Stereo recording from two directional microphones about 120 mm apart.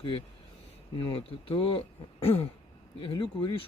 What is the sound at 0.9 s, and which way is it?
Speech, 45° left (ahead or behind).